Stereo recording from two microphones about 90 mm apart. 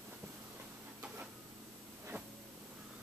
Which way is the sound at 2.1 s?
30° right (ahead or behind).